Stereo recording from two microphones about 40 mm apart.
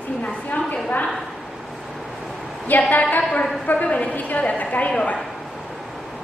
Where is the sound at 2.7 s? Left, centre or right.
Left.